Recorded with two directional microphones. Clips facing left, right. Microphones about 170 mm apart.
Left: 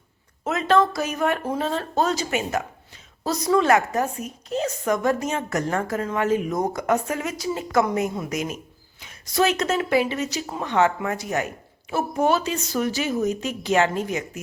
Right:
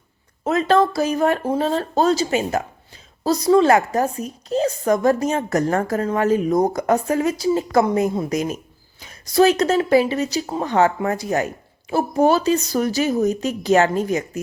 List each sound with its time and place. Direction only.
0.4 s speech: 35° right (ahead or behind)